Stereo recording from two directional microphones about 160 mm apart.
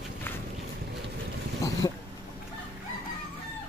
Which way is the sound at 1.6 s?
20° left (ahead or behind).